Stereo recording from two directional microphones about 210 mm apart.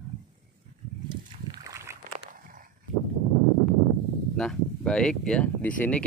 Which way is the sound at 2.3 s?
40° right (ahead or behind).